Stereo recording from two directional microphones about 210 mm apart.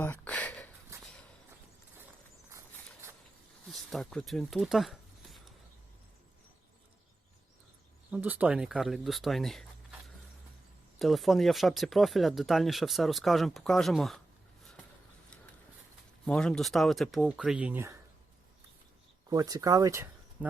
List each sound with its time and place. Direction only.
0.0 s a sound: 10° left (ahead or behind)
0.9 s walk: 15° right (ahead or behind)
3.7 s speech: centre (ahead or behind)
8.1 s speech: 5° right (ahead or behind)
11.0 s speech: centre (ahead or behind)
16.2 s speech: 5° left (ahead or behind)
19.3 s speech: 15° right (ahead or behind)